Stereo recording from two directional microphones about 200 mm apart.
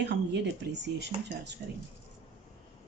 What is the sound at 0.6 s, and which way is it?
Speech, 60° right (ahead or behind).